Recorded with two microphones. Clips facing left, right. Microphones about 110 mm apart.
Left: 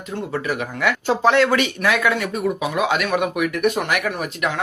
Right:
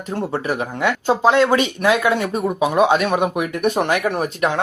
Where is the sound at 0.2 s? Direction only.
30° right (ahead or behind).